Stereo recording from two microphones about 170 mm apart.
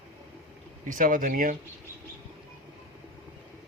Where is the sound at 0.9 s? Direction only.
55° right (ahead or behind).